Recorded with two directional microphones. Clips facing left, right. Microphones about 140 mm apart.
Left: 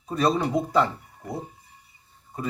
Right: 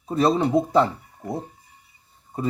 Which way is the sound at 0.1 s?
25° right (ahead or behind).